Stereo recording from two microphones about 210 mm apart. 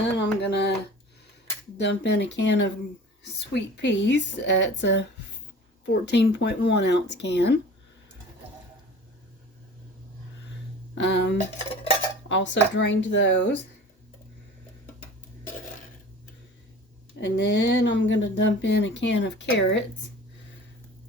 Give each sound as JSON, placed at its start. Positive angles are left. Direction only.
{"t": 0.2, "sound": "a sound", "side_deg": 55}
{"t": 1.8, "sound": "speech", "side_deg": 55}
{"t": 10.9, "sound": "speech", "side_deg": 55}
{"t": 11.5, "sound": "a sound", "side_deg": 30}
{"t": 12.3, "sound": "speech", "side_deg": 60}
{"t": 17.2, "sound": "speech", "side_deg": 55}